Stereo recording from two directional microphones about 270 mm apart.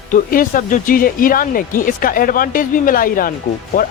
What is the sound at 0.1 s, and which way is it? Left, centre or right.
Speech, left.